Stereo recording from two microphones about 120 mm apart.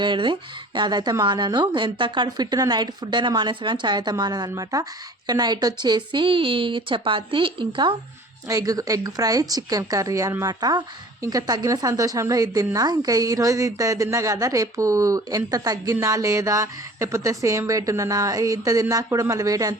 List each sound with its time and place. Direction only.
0.0 s speech: 40° right (ahead or behind)
8.4 s speech: 30° right (ahead or behind)